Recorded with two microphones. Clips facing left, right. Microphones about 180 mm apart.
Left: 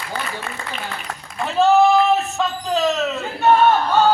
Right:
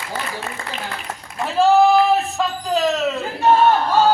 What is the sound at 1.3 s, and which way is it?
Speech, 5° right (ahead or behind).